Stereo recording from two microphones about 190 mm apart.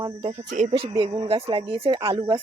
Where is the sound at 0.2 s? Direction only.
30° right (ahead or behind).